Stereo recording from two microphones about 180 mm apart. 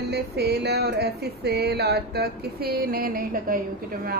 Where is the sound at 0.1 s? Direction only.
65° right (ahead or behind).